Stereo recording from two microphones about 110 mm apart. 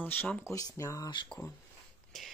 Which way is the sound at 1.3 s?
5° left (ahead or behind).